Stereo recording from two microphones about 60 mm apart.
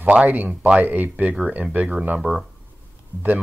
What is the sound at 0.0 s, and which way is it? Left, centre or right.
Speech, right.